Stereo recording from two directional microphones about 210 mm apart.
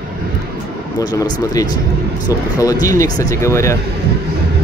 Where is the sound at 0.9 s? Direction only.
20° left (ahead or behind).